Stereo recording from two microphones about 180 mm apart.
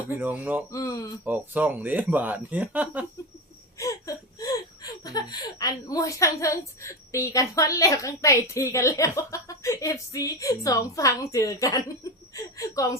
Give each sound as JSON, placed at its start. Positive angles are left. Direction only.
{"t": 0.2, "sound": "speech", "side_deg": -10}
{"t": 0.7, "sound": "laughter", "side_deg": 20}
{"t": 1.2, "sound": "speech", "side_deg": -10}
{"t": 3.8, "sound": "laughter", "side_deg": 20}
{"t": 12.3, "sound": "speech", "side_deg": 20}